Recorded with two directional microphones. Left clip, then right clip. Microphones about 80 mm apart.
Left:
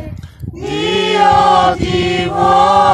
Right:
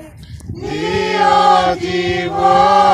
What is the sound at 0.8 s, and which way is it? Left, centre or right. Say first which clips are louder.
Choir: left 3 dB; centre.